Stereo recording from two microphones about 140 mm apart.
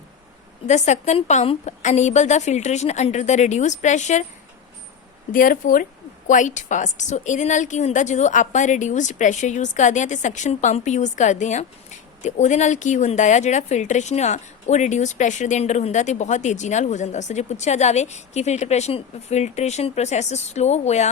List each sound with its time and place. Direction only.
0.7 s a woman's voice: 55° left (ahead or behind)
5.3 s speech: 80° left
6.2 s a woman's voice: 65° left (ahead or behind)